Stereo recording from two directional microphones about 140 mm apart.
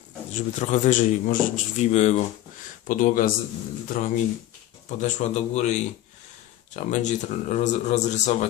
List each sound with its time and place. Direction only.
0.3 s a man's voice: 55° left (ahead or behind)
2.8 s speech: 70° left (ahead or behind)
4.9 s a man's voice: 55° left (ahead or behind)
6.7 s a man's voice: 60° left (ahead or behind)